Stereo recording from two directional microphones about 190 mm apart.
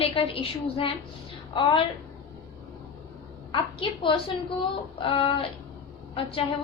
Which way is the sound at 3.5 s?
25° left (ahead or behind).